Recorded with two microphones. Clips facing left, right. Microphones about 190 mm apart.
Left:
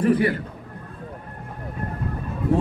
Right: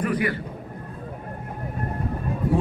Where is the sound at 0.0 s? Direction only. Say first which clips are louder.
Left 5 dB; 30° left (ahead or behind).